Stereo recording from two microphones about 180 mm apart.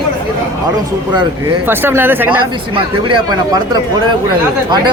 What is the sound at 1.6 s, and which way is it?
Speech, 10° right (ahead or behind).